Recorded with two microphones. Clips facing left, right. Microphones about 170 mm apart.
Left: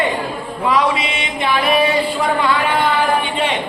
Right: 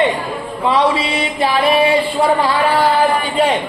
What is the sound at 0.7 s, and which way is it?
Speech, 30° right (ahead or behind).